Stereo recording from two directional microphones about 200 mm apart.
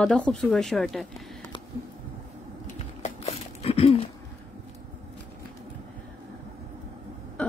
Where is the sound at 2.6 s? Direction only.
35° left (ahead or behind).